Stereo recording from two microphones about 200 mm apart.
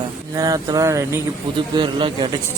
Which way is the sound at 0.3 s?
15° right (ahead or behind).